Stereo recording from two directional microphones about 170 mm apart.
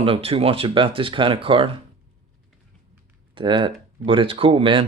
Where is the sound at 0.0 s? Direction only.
35° right (ahead or behind).